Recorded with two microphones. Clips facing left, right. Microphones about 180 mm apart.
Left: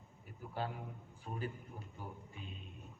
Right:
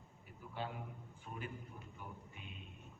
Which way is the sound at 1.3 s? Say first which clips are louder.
Left 4 dB; 30° left (ahead or behind).